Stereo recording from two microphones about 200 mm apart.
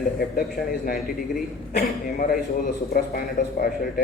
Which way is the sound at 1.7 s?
45° left (ahead or behind).